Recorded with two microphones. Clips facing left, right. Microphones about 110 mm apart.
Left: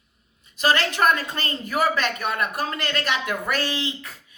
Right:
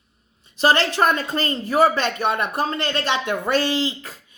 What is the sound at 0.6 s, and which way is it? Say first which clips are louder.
A woman's voice: right 3 dB; 30° right (ahead or behind).